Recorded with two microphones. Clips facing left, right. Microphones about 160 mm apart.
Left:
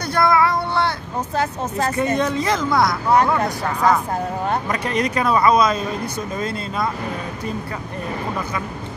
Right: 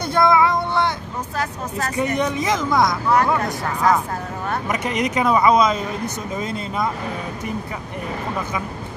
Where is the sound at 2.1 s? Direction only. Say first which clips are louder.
Left 1 dB; 15° right (ahead or behind).